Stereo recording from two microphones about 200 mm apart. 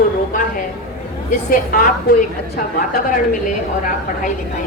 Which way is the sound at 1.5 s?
45° left (ahead or behind).